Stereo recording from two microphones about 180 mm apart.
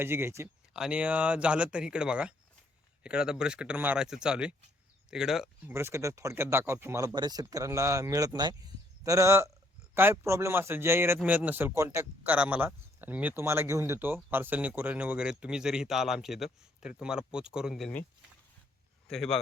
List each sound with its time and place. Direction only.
0.0 s a man's voice: 10° right (ahead or behind)
5.7 s a man's voice: 15° right (ahead or behind)
19.0 s speech: centre (ahead or behind)